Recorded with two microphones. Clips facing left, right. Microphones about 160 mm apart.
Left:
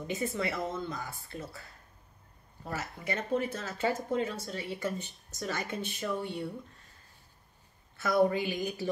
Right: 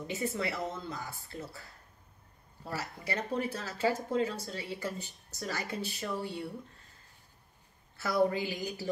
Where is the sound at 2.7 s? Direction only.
35° right (ahead or behind).